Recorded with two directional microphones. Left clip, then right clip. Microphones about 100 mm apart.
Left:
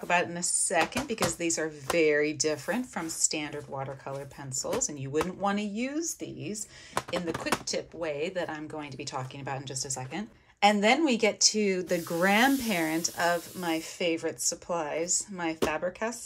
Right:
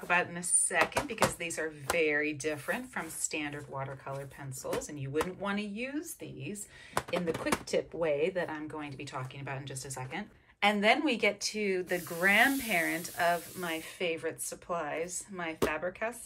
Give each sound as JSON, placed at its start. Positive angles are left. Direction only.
{"t": 0.1, "sound": "a woman's voice", "side_deg": 30}
{"t": 7.0, "sound": "speech", "side_deg": 5}
{"t": 8.5, "sound": "speech", "side_deg": 20}
{"t": 9.1, "sound": "a woman's voice", "side_deg": 30}